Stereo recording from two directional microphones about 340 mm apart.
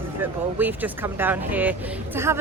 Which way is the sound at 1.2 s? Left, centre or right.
Centre.